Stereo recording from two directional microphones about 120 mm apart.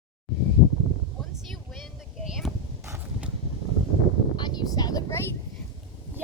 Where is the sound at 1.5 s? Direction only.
Centre (ahead or behind).